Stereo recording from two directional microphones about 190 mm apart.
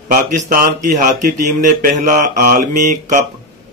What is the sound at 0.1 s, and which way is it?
A man's voice, 40° right (ahead or behind).